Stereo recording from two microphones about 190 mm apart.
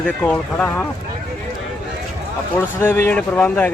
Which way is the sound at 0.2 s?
10° left (ahead or behind).